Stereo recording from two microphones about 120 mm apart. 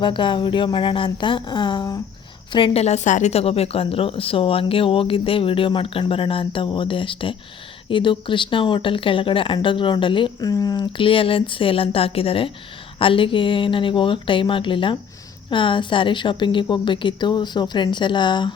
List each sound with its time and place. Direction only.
0.0 s a woman's voice: 45° left (ahead or behind)
2.7 s a woman's voice: 65° left (ahead or behind); by 10.3 s 45° left (ahead or behind)
10.4 s a woman's voice: 30° left (ahead or behind)
10.9 s a woman's voice: 45° left (ahead or behind)